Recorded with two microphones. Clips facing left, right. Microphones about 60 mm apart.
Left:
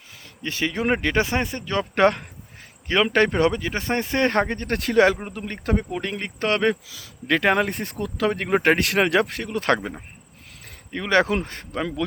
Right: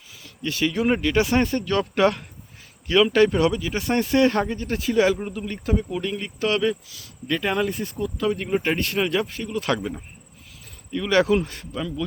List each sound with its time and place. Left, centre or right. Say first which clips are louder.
0.1 s speech: right 2 dB; left
1.4 s speech: right 4 dB; centre
2.0 s a man's voice: left 5 dB; left
4.4 s speech: even; left
5.3 s speech: even; left
7.3 s speech: left 3 dB; left
10.9 s a man's voice: right 1 dB; left